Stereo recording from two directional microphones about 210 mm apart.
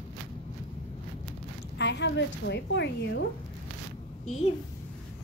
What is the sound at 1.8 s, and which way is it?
A woman's voice, 55° left (ahead or behind).